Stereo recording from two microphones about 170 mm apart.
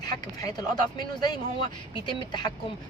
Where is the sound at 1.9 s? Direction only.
25° left (ahead or behind).